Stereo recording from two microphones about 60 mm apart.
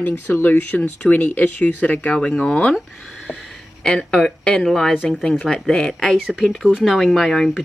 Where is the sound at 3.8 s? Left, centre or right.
Centre.